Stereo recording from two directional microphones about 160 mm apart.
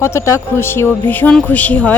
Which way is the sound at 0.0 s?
15° left (ahead or behind).